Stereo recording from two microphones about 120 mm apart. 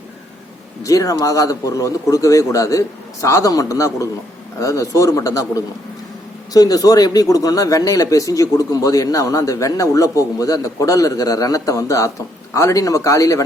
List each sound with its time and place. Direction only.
0.8 s speech: 30° left (ahead or behind)